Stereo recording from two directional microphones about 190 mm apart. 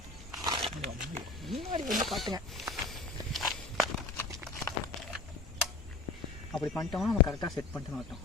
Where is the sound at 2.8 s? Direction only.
Centre (ahead or behind).